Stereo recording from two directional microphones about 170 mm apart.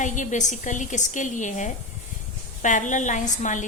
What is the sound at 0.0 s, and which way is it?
A woman's voice, 45° left (ahead or behind).